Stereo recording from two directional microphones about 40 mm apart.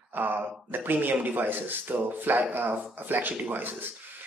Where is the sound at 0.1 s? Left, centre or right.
Right.